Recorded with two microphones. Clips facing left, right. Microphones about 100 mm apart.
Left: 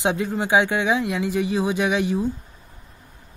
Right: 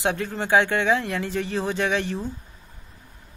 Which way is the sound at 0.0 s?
15° left (ahead or behind).